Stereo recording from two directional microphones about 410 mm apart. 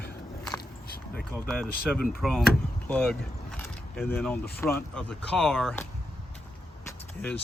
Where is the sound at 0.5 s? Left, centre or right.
Left.